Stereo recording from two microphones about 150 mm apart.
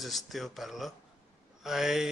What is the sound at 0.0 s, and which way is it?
A man's voice, centre (ahead or behind).